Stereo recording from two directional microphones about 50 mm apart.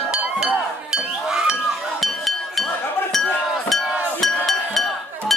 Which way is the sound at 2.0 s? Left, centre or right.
Centre.